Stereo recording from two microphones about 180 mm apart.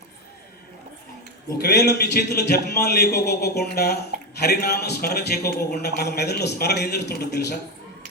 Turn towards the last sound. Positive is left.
turn(degrees=65)  # may be behind; listen again after turning